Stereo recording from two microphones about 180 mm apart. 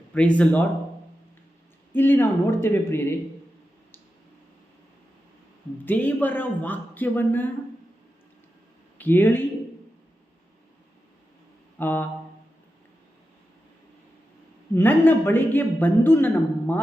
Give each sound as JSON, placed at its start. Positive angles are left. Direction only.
{"t": 0.1, "sound": "a man's voice", "side_deg": 5}
{"t": 1.9, "sound": "a man's voice", "side_deg": 10}
{"t": 5.8, "sound": "a man's voice", "side_deg": 10}
{"t": 9.0, "sound": "speech", "side_deg": 10}
{"t": 11.8, "sound": "a man's voice", "side_deg": 10}
{"t": 14.8, "sound": "a man's voice", "side_deg": 10}